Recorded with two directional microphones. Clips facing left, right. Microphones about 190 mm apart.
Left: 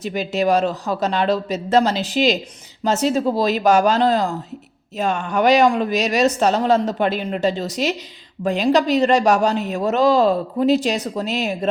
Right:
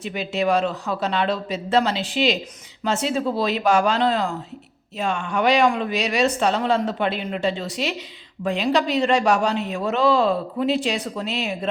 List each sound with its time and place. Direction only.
0.0 s speech: 40° left (ahead or behind)